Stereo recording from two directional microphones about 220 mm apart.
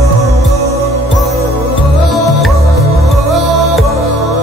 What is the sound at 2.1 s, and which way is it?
Music, centre (ahead or behind).